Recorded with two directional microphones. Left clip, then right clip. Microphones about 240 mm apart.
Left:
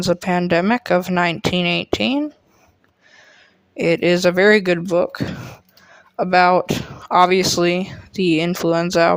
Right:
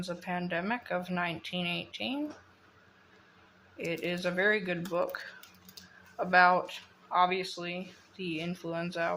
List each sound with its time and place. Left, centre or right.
0.0 s speech: left
3.8 s speech: left